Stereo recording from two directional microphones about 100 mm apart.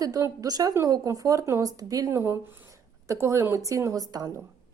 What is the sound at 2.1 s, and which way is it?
A woman's voice, 25° right (ahead or behind).